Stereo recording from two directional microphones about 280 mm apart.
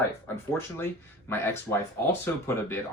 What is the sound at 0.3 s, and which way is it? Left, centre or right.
Speech, centre.